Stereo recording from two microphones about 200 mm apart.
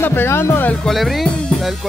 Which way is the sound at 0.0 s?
10° left (ahead or behind).